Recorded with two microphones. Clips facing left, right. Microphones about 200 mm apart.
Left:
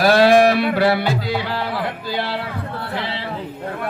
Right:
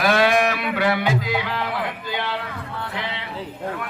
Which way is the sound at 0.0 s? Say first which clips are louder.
Left 6 dB; 35° left (ahead or behind).